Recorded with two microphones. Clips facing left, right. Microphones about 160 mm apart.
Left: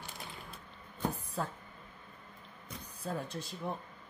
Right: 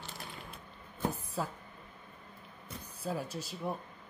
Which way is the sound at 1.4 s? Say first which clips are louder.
Right 1 dB; 5° right (ahead or behind).